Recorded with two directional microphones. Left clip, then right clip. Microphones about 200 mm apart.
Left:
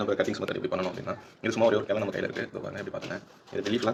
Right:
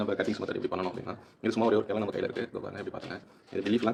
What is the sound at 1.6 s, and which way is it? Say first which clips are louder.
Speech: left 3 dB; 50° right (ahead or behind).